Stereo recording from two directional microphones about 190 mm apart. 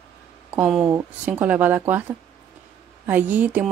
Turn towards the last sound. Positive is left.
turn(degrees=-10)  # may be behind; listen again after turning